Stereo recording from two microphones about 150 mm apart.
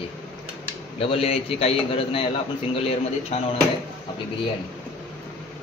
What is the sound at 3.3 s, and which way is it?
Speech, 45° left (ahead or behind).